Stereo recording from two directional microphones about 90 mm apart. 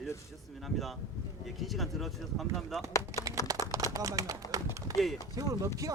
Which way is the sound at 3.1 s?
40° right (ahead or behind).